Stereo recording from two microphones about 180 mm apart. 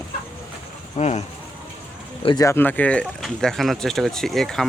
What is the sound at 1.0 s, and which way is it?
Speech, 35° left (ahead or behind).